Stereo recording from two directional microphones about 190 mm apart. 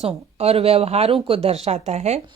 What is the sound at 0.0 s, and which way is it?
Speech, 35° right (ahead or behind).